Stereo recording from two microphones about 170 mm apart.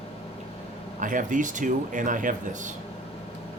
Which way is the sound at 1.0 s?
50° right (ahead or behind).